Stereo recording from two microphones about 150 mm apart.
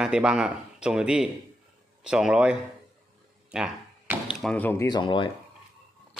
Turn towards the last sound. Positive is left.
turn(degrees=35)  # may be behind; listen again after turning